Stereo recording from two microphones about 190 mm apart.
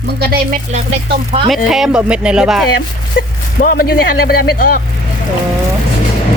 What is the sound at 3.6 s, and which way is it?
A woman's voice, 50° left (ahead or behind).